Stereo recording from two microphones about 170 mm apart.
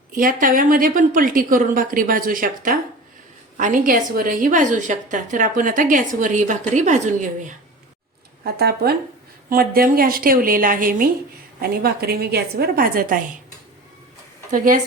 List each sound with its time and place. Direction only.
0.1 s a woman's voice: 55° right (ahead or behind)
8.4 s a woman's voice: 65° right (ahead or behind)
14.5 s a woman's voice: 55° right (ahead or behind)